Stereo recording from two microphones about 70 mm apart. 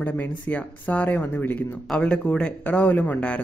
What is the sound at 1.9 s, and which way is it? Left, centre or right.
A man's voice, centre.